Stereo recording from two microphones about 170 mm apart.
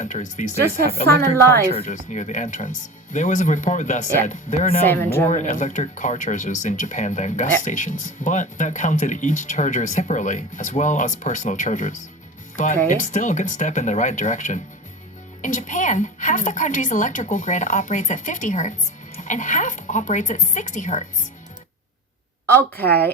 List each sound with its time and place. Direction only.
0.0 s speech: 45° left (ahead or behind)
1.0 s a woman's voice: 15° left (ahead or behind)
1.7 s speech: 45° left (ahead or behind)
4.9 s a woman's voice: 10° left (ahead or behind)
5.3 s speech: 50° left (ahead or behind)